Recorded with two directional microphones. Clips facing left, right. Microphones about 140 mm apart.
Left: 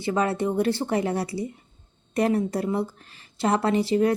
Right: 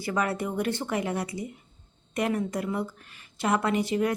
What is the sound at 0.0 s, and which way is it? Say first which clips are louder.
A woman's voice: left 4 dB; 25° left (ahead or behind).